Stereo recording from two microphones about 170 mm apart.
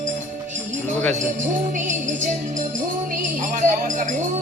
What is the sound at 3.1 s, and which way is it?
Speech, 50° right (ahead or behind).